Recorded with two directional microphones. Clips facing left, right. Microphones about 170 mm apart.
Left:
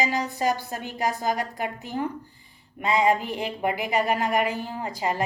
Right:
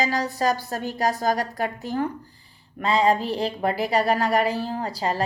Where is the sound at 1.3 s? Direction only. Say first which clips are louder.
Right 3 dB; 20° left (ahead or behind).